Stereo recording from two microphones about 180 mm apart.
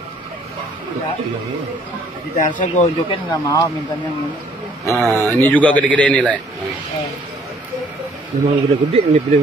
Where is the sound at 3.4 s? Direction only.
15° left (ahead or behind).